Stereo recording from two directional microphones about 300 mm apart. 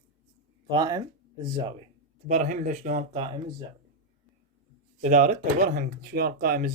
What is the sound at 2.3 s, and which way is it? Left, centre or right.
Speech, right.